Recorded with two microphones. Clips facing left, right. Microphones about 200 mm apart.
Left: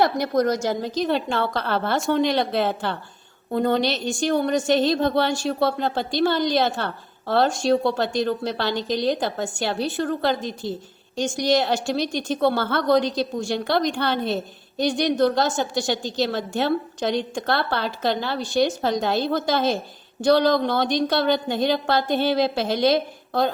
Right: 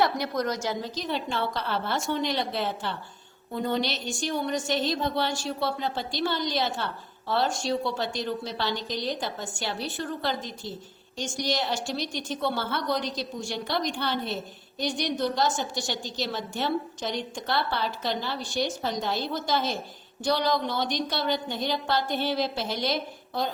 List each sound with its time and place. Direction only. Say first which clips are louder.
0.0 s a woman's voice: left 6 dB; 45° left (ahead or behind); by 13.0 s 60° left (ahead or behind)
13.0 s a woman's voice: left 10 dB; 25° left (ahead or behind)
13.5 s a woman's voice: left 6 dB; 65° left (ahead or behind)